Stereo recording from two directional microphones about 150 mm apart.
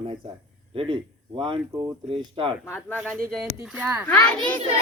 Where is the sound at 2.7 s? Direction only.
15° left (ahead or behind).